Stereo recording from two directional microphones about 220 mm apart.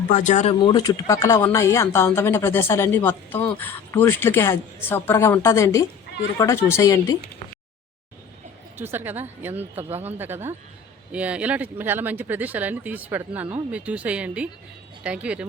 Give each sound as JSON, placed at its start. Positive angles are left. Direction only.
{"t": 0.1, "sound": "speech", "side_deg": 35}
{"t": 0.7, "sound": "speech", "side_deg": 20}
{"t": 8.8, "sound": "speech", "side_deg": -10}